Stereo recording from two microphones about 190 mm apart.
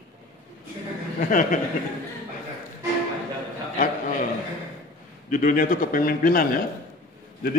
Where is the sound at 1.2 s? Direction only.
45° left (ahead or behind).